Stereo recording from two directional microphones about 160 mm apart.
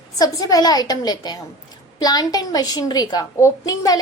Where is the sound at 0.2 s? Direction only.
25° left (ahead or behind).